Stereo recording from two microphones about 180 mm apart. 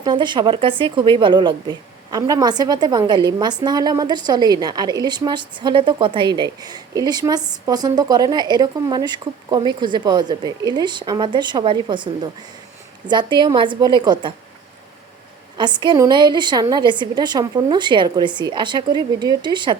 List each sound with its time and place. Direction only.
0.0 s a woman's voice: 25° right (ahead or behind)
15.5 s a woman's voice: 25° right (ahead or behind)